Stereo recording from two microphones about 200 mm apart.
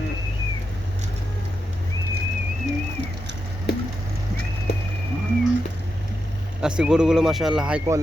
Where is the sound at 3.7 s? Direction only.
55° left (ahead or behind).